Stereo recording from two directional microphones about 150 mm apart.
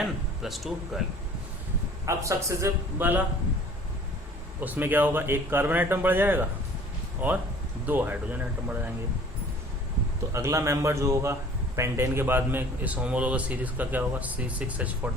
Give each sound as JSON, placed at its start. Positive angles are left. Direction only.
{"t": 0.0, "sound": "speech", "side_deg": 0}
{"t": 2.0, "sound": "a man's voice", "side_deg": -20}
{"t": 4.6, "sound": "a man's voice", "side_deg": -10}
{"t": 10.3, "sound": "a man's voice", "side_deg": -20}